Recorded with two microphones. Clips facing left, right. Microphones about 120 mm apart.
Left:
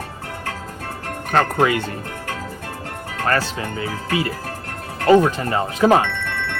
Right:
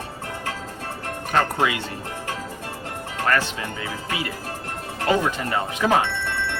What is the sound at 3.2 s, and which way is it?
Speech, 35° left (ahead or behind).